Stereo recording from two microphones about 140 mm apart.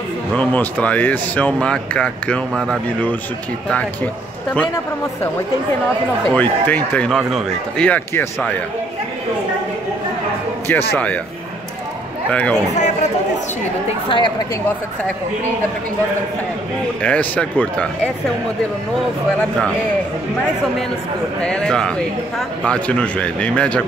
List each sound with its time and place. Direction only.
0.3 s speech: 10° left (ahead or behind)
6.2 s speech: 10° left (ahead or behind)
7.2 s speech: centre (ahead or behind)
10.7 s speech: 10° left (ahead or behind)
12.3 s speech: 10° left (ahead or behind)
12.7 s speech: 55° left (ahead or behind)
14.0 s a woman's voice: 35° left (ahead or behind)
17.0 s speech: 10° left (ahead or behind)
21.4 s speech: 5° left (ahead or behind)